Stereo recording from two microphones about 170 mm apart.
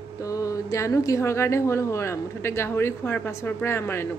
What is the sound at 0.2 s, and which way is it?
A woman's voice, 20° left (ahead or behind).